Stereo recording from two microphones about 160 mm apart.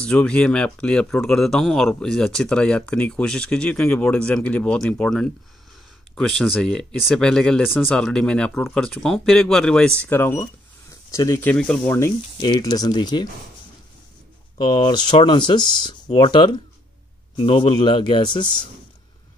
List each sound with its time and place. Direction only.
0.0 s speech: 5° left (ahead or behind)
11.5 s speech: 5° left (ahead or behind)
12.4 s speech: 25° left (ahead or behind)
14.6 s speech: 25° left (ahead or behind)